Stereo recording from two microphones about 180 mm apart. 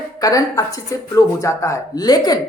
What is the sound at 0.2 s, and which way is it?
Speech, 20° left (ahead or behind).